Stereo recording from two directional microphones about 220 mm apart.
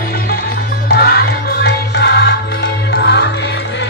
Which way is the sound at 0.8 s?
45° left (ahead or behind).